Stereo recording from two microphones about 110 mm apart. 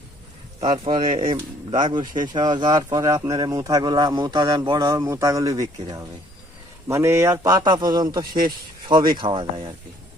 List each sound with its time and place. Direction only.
0.6 s speech: 50° right (ahead or behind)
4.9 s speech: 30° right (ahead or behind); by 9.7 s 50° right (ahead or behind)